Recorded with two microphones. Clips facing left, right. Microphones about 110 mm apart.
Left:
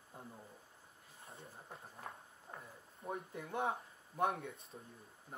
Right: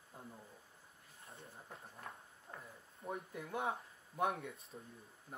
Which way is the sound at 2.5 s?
15° left (ahead or behind).